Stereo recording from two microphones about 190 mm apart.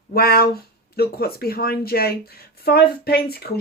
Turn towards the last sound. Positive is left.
turn(degrees=55)  # may be behind; listen again after turning